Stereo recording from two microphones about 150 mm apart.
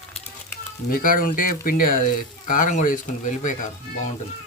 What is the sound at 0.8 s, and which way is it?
Speech, 70° left (ahead or behind).